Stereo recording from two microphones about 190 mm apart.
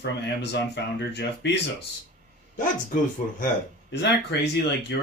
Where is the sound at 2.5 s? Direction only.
45° left (ahead or behind).